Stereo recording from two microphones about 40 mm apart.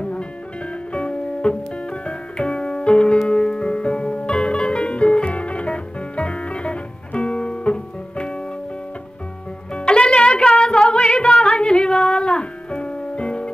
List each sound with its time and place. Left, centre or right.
0.9 s music: left
9.8 s music: left